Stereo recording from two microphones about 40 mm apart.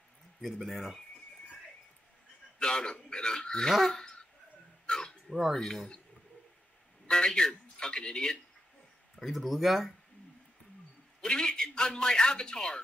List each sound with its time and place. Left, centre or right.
0.4 s speech: centre
2.6 s a man's voice: left
4.8 s dog: centre
5.5 s speech: centre
7.1 s a man's voice: centre
9.2 s speech: centre
11.1 s a man's voice: left